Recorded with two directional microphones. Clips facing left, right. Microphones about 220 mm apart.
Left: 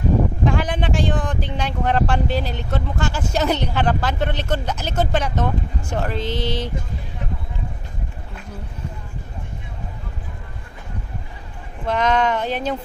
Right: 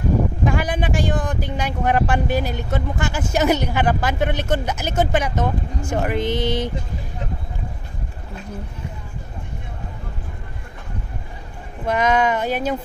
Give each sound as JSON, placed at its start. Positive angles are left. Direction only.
{"t": 0.5, "sound": "speech", "side_deg": -10}
{"t": 6.3, "sound": "a sound", "side_deg": -50}
{"t": 11.8, "sound": "speech", "side_deg": -10}